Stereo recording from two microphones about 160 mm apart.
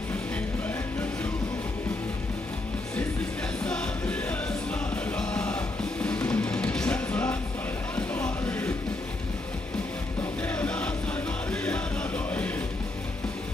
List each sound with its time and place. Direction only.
3.6 s music: 5° left (ahead or behind)
10.4 s music: 10° left (ahead or behind)